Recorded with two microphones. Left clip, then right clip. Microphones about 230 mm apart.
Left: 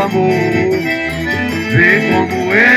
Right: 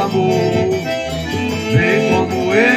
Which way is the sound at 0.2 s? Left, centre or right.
Left.